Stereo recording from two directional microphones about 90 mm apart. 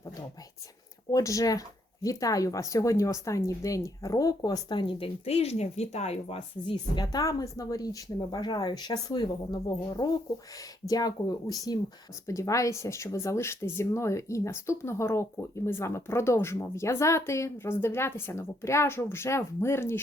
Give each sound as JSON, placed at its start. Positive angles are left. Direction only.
{"t": 1.1, "sound": "speech", "side_deg": 40}
{"t": 4.7, "sound": "speech", "side_deg": 70}
{"t": 6.3, "sound": "speech", "side_deg": 70}
{"t": 7.0, "sound": "a woman's voice", "side_deg": 45}